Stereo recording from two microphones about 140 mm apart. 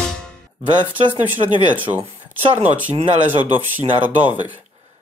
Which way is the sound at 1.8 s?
45° right (ahead or behind).